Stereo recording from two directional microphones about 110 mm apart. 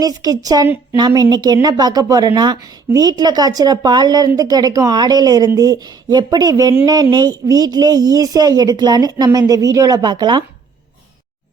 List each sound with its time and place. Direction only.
0.0 s speech: 35° right (ahead or behind)